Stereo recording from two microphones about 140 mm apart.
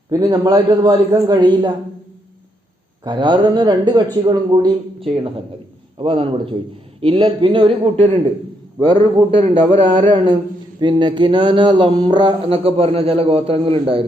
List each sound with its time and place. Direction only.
0.1 s a man's voice: 25° right (ahead or behind)
3.0 s a man's voice: 35° right (ahead or behind)